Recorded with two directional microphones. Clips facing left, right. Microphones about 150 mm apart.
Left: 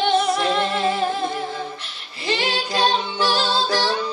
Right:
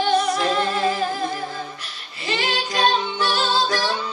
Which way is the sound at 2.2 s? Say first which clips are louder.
Left 1 dB; 30° left (ahead or behind).